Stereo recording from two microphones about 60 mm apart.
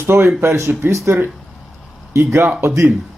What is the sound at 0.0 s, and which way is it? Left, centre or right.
Speech, right.